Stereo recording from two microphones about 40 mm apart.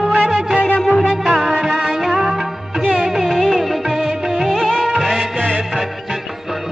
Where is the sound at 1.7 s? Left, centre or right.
Centre.